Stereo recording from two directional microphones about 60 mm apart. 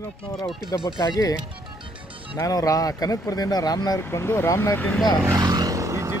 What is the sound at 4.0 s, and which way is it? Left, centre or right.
Speech, left.